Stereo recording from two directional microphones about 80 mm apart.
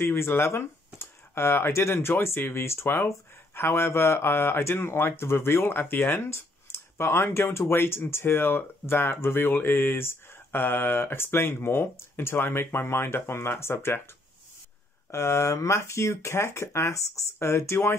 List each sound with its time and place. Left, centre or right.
0.0 s speech: left
15.0 s speech: left